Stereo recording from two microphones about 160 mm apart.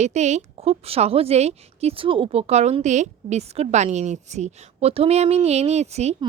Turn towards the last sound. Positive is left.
turn(degrees=-45)  # may be behind; listen again after turning